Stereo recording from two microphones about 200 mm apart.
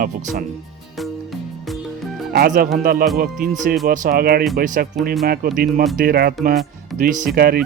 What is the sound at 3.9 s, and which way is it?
Speech, 50° right (ahead or behind).